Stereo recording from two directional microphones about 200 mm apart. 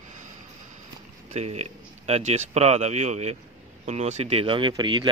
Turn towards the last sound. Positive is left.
turn(degrees=-20)  # may be behind; listen again after turning